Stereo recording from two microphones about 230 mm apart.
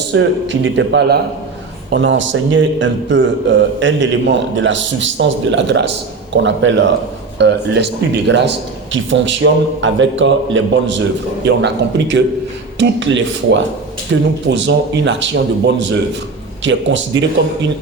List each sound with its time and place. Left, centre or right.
0.1 s a man's voice: right